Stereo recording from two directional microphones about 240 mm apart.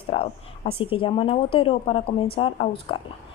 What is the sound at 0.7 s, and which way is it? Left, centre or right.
A woman's voice, left.